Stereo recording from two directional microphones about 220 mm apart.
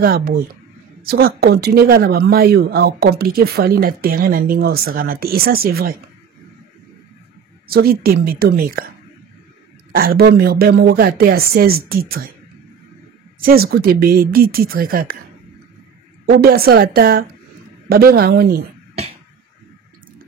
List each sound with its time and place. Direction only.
0.0 s speech: 45° right (ahead or behind)
7.6 s speech: 45° right (ahead or behind)
9.9 s speech: 45° right (ahead or behind)
13.4 s speech: 40° right (ahead or behind)
16.3 s speech: 45° right (ahead or behind)